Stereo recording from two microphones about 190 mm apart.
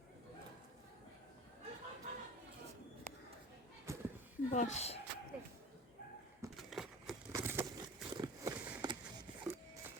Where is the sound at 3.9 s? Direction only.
15° right (ahead or behind).